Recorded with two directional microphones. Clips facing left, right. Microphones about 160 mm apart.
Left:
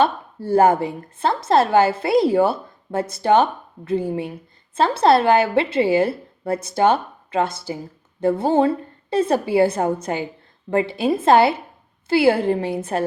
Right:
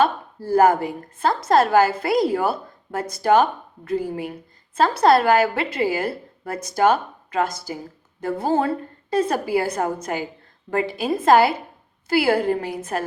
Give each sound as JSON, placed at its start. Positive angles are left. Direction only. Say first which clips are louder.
{"t": 0.0, "sound": "a woman's voice", "louder": "left 1 dB", "side_deg": 25}